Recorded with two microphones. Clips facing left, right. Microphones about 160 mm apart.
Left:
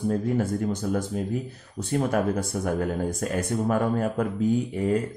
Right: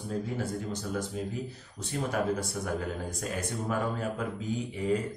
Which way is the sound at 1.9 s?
50° left (ahead or behind).